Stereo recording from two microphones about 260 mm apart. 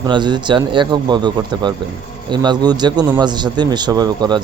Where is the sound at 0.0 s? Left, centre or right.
Centre.